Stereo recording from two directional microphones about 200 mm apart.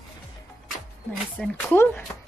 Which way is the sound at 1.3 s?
10° left (ahead or behind).